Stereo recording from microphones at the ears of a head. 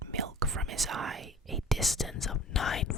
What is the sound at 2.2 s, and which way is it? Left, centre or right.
Speech, left.